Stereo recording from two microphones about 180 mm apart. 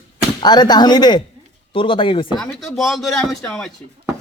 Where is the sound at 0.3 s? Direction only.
25° left (ahead or behind).